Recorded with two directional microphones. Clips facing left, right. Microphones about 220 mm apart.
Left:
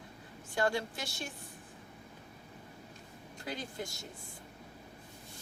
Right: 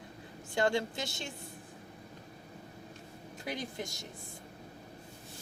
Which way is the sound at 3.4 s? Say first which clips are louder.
Right 2 dB; 20° right (ahead or behind).